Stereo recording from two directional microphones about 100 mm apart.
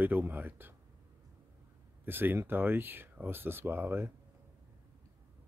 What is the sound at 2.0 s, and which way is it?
Speech, 20° right (ahead or behind).